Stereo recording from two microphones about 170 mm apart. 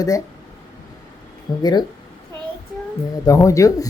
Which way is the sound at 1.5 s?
25° left (ahead or behind).